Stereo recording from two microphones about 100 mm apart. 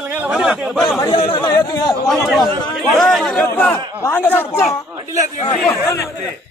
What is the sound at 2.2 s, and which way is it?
A man's voice, centre (ahead or behind).